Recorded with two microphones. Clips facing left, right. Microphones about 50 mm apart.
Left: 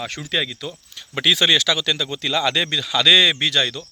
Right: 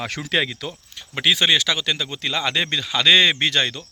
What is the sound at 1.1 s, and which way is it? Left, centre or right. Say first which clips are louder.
Speech: left 1 dB; centre.